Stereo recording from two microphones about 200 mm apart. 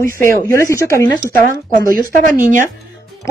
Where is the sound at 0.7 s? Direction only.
15° left (ahead or behind).